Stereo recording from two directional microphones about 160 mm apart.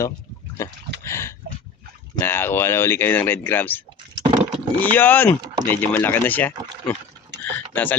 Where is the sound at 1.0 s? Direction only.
15° left (ahead or behind).